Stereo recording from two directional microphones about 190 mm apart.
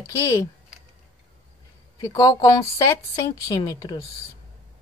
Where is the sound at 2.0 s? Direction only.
15° left (ahead or behind).